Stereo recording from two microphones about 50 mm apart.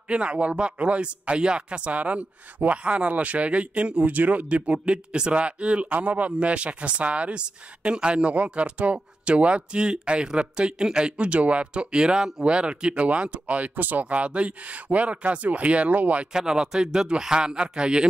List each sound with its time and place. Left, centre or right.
0.1 s speech: right
16.3 s speech: centre